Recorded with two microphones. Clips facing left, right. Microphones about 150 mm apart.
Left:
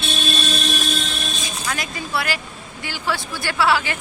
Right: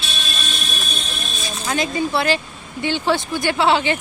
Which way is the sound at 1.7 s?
25° right (ahead or behind).